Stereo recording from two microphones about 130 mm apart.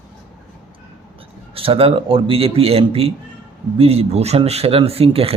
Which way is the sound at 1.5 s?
45° right (ahead or behind).